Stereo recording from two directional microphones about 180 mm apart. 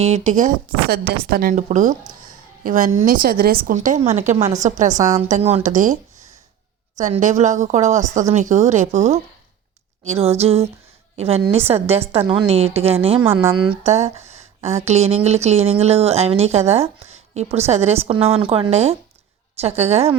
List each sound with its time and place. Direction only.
0.0 s speech: 40° right (ahead or behind)
0.9 s a woman's voice: 60° right (ahead or behind)
1.6 s a woman's voice: 40° right (ahead or behind)
4.9 s a woman's voice: 20° right (ahead or behind)
5.3 s speech: 35° right (ahead or behind)
7.0 s speech: 45° right (ahead or behind)